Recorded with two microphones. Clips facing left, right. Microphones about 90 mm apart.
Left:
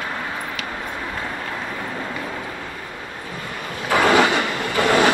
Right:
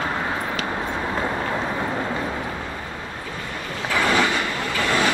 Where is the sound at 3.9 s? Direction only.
65° left (ahead or behind).